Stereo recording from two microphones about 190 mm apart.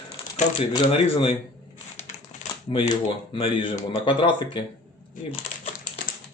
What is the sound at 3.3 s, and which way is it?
Speech, 25° left (ahead or behind).